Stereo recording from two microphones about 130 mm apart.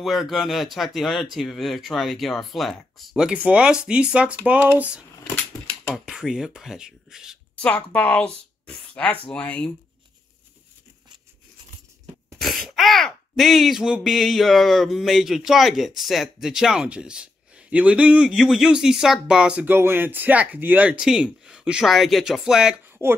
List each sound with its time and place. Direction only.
0.0 s speech: centre (ahead or behind)
7.5 s speech: 10° left (ahead or behind)
12.4 s speech: centre (ahead or behind)
22.8 s a sound: 15° right (ahead or behind)